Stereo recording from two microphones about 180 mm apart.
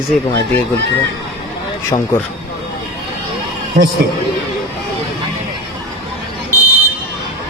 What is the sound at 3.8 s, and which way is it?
Speech, 50° right (ahead or behind).